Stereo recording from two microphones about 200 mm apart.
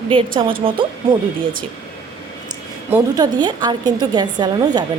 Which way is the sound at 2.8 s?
15° right (ahead or behind).